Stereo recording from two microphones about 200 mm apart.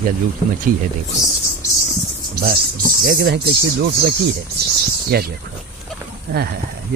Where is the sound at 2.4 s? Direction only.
50° right (ahead or behind).